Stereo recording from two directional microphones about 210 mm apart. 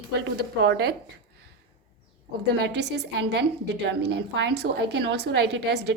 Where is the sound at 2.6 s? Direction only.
55° right (ahead or behind).